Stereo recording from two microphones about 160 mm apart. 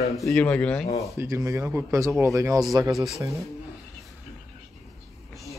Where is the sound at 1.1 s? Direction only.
15° right (ahead or behind).